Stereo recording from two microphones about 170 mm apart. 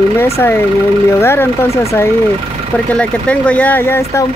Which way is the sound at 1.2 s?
15° left (ahead or behind).